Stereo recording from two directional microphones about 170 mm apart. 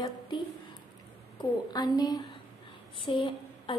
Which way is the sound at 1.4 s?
25° left (ahead or behind).